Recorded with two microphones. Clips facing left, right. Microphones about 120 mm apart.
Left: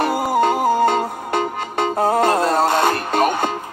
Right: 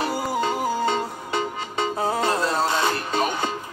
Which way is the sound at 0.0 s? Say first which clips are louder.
Left 7 dB; 55° left (ahead or behind).